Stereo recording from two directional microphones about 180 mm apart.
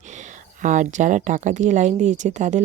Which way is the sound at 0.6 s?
45° right (ahead or behind).